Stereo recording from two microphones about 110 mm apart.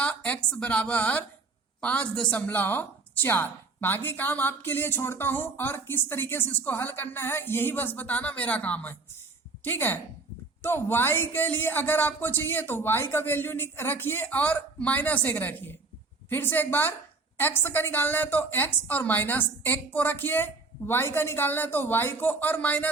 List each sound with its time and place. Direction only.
0.0 s a woman's voice: 10° left (ahead or behind)